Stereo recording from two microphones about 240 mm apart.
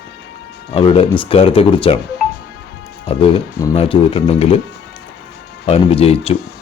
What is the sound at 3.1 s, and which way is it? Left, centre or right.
Speech, left.